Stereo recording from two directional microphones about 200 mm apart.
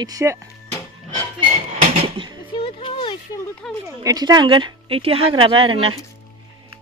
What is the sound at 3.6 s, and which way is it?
Speech, 5° left (ahead or behind).